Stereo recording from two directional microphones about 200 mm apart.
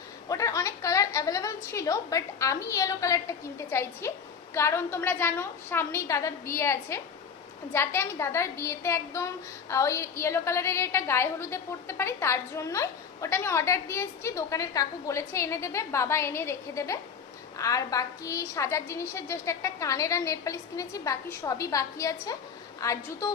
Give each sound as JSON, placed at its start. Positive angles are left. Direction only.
{"t": 0.3, "sound": "a woman's voice", "side_deg": 15}